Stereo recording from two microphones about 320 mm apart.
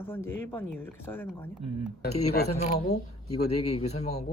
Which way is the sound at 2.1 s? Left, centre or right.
Left.